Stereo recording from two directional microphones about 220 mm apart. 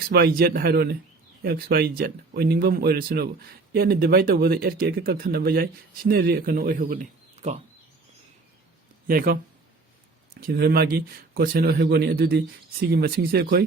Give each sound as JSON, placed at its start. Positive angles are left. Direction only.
{"t": 0.1, "sound": "speech", "side_deg": -45}
{"t": 9.0, "sound": "speech", "side_deg": -45}
{"t": 10.4, "sound": "speech", "side_deg": -45}